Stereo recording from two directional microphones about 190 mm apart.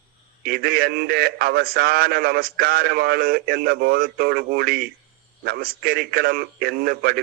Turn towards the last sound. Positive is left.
turn(degrees=-55)  # may be behind; listen again after turning